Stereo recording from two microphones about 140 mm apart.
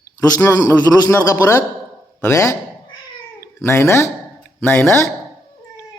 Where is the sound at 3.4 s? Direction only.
20° left (ahead or behind).